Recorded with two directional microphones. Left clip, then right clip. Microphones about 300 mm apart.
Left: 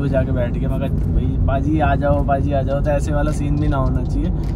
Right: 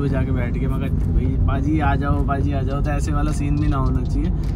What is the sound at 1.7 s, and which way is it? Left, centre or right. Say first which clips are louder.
Speech: left 4 dB; centre.